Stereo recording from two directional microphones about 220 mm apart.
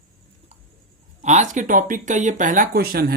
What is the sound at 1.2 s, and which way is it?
Speech, 30° right (ahead or behind).